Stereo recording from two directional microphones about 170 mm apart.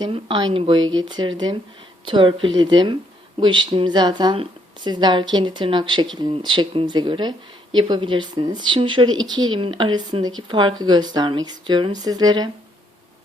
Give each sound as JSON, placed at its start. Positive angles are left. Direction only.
{"t": 0.0, "sound": "speech", "side_deg": -30}